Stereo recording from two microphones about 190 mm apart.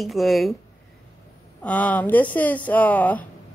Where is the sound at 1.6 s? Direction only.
10° left (ahead or behind).